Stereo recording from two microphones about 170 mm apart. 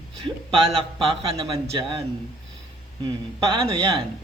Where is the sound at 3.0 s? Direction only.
25° right (ahead or behind).